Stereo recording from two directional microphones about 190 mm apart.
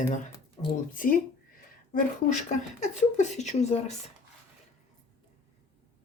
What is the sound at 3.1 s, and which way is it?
Speech, 40° left (ahead or behind).